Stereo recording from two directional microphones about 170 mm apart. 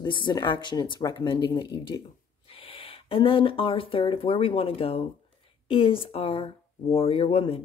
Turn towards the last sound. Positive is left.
turn(degrees=35)  # may be behind; listen again after turning